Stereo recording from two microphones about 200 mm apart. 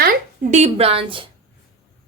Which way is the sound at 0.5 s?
30° right (ahead or behind).